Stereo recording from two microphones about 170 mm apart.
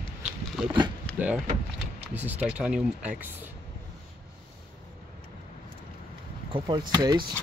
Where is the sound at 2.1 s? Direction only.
10° right (ahead or behind).